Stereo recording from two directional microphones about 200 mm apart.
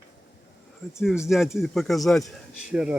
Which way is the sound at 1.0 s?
Centre (ahead or behind).